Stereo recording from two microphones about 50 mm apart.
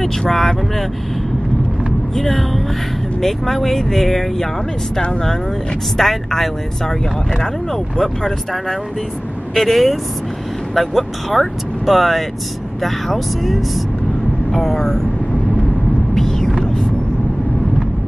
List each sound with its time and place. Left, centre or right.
0.0 s speech: centre
2.1 s speech: centre
5.9 s speech: centre
16.2 s a sound: centre